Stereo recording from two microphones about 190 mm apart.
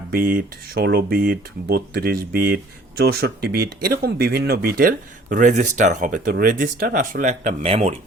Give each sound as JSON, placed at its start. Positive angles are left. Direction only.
{"t": 0.1, "sound": "speech", "side_deg": -50}